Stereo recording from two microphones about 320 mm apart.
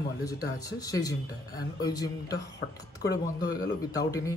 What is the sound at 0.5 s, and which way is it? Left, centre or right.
Speech, centre.